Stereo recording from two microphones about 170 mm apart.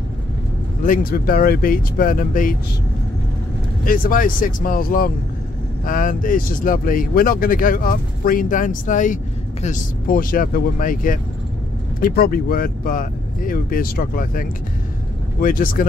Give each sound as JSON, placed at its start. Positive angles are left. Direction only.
{"t": 0.8, "sound": "speech", "side_deg": 55}
{"t": 3.8, "sound": "speech", "side_deg": 55}